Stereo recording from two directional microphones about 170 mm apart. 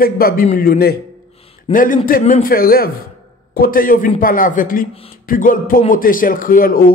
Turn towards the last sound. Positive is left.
turn(degrees=60)  # may be behind; listen again after turning